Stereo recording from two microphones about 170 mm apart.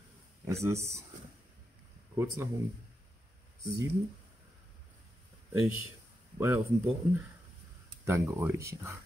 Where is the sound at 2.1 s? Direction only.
15° right (ahead or behind).